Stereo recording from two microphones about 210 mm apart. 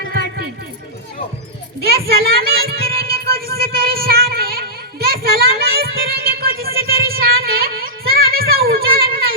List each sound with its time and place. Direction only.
2.1 s music: 45° right (ahead or behind)